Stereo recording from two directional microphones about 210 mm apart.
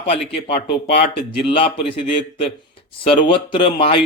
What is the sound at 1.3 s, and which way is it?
Speech, 25° left (ahead or behind).